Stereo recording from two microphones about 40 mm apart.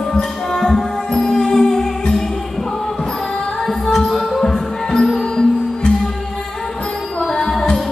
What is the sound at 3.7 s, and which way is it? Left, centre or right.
Music, centre.